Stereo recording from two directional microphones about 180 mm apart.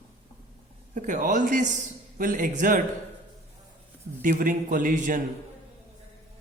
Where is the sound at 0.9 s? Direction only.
45° right (ahead or behind).